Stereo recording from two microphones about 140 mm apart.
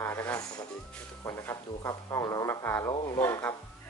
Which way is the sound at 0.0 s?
20° left (ahead or behind).